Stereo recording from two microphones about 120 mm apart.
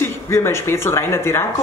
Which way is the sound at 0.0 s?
20° left (ahead or behind).